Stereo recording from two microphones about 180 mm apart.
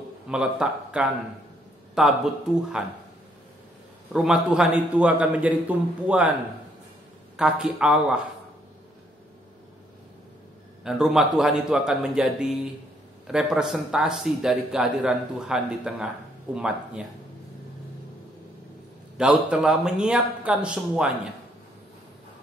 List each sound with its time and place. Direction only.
0.3 s a man's voice: 5° right (ahead or behind)
4.1 s a man's voice: 5° right (ahead or behind)
7.3 s a man's voice: 5° right (ahead or behind)
10.8 s a man's voice: 5° right (ahead or behind)
19.1 s a man's voice: 5° right (ahead or behind)